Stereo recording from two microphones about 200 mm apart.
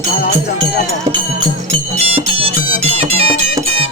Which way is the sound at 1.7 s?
30° right (ahead or behind).